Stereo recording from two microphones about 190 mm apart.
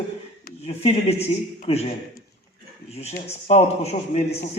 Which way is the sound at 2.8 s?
35° left (ahead or behind).